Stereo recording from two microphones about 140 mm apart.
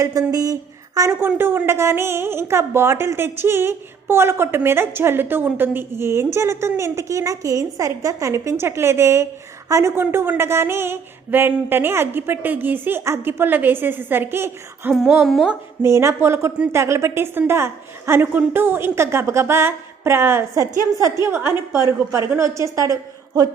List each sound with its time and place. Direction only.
0.0 s speech: 20° right (ahead or behind)
15.2 s a woman's voice: 5° right (ahead or behind)
15.8 s a woman's voice: 20° right (ahead or behind)